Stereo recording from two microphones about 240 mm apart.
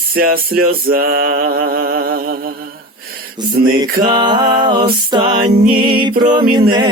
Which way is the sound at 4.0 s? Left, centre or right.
Centre.